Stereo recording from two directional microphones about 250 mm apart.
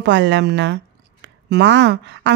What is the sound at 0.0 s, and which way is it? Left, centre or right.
Speech, right.